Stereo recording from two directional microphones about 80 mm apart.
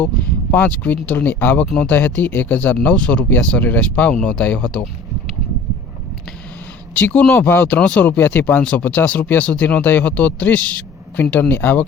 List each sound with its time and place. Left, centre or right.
0.5 s speech: centre
1.6 s speech: centre
1.9 s speech: left
6.9 s speech: centre